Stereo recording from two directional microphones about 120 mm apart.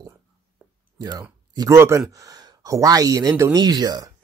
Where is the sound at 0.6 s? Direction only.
15° right (ahead or behind).